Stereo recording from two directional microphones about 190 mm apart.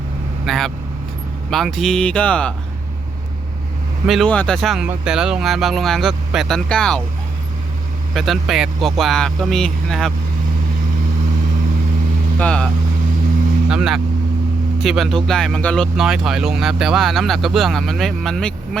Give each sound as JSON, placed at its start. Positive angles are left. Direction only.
{"t": 0.4, "sound": "speech", "side_deg": 0}
{"t": 4.0, "sound": "speech", "side_deg": 0}
{"t": 8.1, "sound": "speech", "side_deg": 0}
{"t": 12.4, "sound": "speech", "side_deg": 5}
{"t": 13.7, "sound": "vehicle", "side_deg": -5}
{"t": 14.8, "sound": "speech", "side_deg": 0}